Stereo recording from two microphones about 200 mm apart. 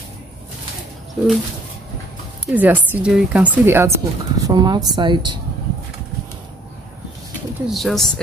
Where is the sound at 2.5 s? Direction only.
10° right (ahead or behind).